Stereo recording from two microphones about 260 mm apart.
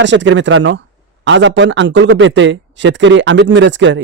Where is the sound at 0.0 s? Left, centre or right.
Right.